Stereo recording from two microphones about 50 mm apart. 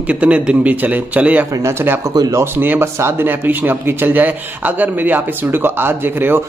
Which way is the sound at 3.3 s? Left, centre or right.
Right.